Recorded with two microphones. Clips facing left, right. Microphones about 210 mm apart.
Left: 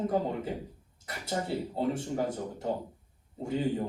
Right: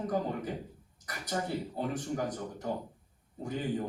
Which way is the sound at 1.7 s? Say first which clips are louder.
Left 5 dB; 25° left (ahead or behind).